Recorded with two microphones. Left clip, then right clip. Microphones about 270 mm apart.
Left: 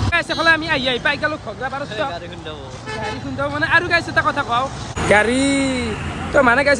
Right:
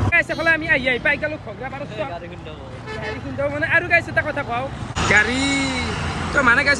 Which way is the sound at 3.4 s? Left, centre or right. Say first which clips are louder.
Left 2 dB; centre.